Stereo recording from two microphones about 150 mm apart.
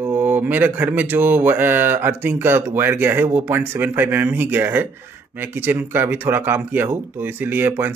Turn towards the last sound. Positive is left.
turn(degrees=-10)  # may be behind; listen again after turning